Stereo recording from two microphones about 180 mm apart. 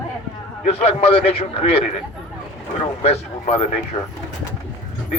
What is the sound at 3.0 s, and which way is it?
Speech, 35° left (ahead or behind).